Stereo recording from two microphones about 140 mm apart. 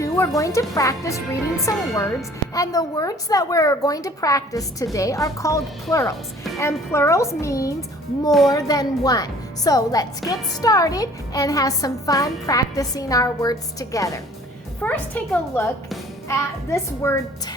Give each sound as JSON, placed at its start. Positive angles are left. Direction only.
{"t": 0.0, "sound": "a woman's voice", "side_deg": 25}
{"t": 14.8, "sound": "a woman's voice", "side_deg": 10}